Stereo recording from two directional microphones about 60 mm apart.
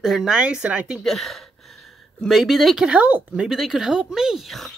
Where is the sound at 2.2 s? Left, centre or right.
Centre.